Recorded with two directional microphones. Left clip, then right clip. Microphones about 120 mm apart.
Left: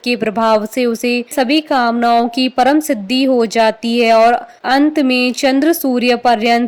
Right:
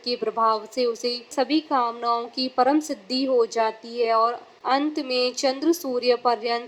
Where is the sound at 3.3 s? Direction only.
55° left (ahead or behind).